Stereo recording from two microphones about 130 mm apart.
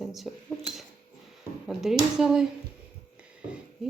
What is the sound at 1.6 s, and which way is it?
Speech, 5° right (ahead or behind).